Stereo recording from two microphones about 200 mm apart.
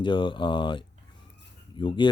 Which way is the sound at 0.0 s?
25° left (ahead or behind).